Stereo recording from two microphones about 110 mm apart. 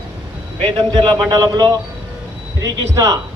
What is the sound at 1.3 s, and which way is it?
A man's voice, 35° right (ahead or behind).